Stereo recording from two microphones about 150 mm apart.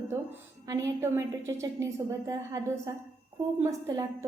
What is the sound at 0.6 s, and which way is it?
A woman's voice, 20° right (ahead or behind).